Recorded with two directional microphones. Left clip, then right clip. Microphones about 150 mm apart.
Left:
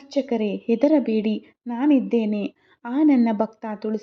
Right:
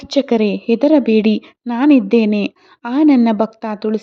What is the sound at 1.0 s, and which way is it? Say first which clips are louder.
A woman's voice: right 10 dB; 30° right (ahead or behind).